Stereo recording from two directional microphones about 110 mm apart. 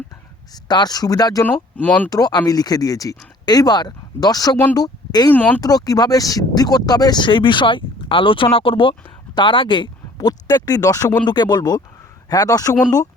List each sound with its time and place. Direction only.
0.5 s speech: 40° left (ahead or behind)
1.5 s speech: 15° left (ahead or behind)
2.0 s speech: 35° left (ahead or behind)
5.3 s speech: 15° left (ahead or behind)
5.5 s speech: 35° left (ahead or behind)